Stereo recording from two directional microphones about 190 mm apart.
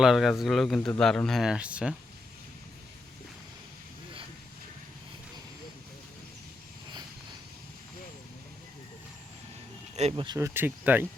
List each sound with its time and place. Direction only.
0.0 s speech: centre (ahead or behind)
9.9 s speech: 35° right (ahead or behind)
10.3 s speech: 15° right (ahead or behind)